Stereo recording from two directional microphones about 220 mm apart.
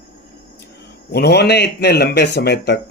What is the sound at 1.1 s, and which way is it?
Speech, 50° left (ahead or behind).